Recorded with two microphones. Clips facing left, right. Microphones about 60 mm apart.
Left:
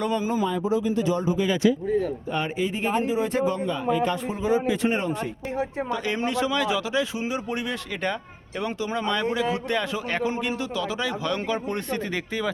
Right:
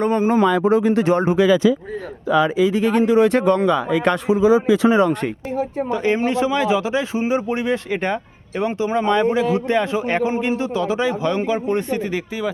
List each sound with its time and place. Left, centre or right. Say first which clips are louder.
0.0 s speech: right 7 dB; right
0.3 s speech: right 9 dB; right
2.2 s speech: right 10 dB; right
4.9 s speech: right 10 dB; right
5.9 s speech: right 10 dB; right